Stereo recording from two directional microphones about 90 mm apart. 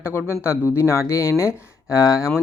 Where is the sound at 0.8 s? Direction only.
30° left (ahead or behind).